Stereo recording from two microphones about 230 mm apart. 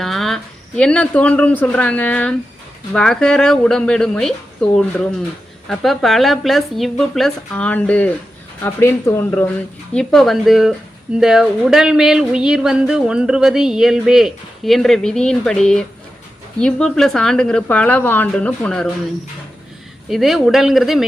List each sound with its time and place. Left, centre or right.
0.0 s a sound: centre
0.8 s speech: centre
20.1 s speech: centre